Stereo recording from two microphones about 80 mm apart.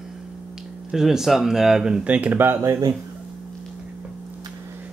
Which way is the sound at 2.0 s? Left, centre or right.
Centre.